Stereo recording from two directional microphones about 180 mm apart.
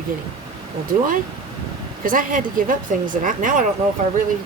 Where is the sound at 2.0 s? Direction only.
50° right (ahead or behind).